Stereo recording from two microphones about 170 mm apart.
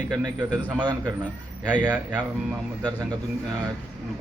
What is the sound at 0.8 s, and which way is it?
Speech, 25° right (ahead or behind).